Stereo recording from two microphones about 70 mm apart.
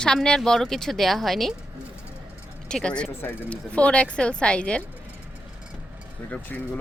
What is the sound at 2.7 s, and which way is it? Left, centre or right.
Speech, centre.